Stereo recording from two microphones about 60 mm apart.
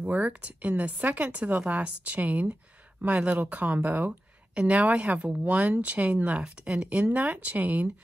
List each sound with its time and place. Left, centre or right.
0.0 s speech: right